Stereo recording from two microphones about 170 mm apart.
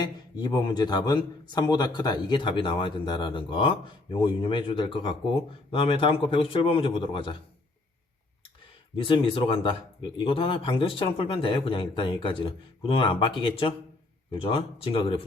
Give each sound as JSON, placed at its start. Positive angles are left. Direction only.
{"t": 0.0, "sound": "a man's voice", "side_deg": 25}
{"t": 9.0, "sound": "speech", "side_deg": 30}